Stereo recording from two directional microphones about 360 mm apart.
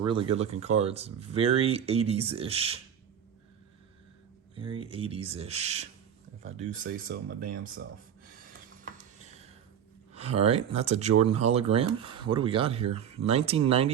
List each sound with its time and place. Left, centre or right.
0.0 s speech: centre
4.5 s speech: centre
10.2 s speech: centre